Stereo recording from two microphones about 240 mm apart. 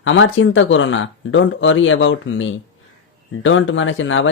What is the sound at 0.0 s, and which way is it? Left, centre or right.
Speech, left.